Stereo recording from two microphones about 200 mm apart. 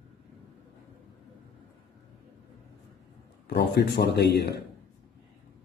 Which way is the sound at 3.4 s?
55° left (ahead or behind).